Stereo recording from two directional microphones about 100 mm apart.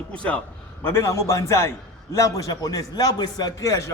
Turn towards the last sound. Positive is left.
turn(degrees=30)  # may be behind; listen again after turning